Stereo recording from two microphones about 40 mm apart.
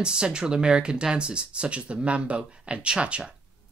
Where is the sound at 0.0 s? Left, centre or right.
Right.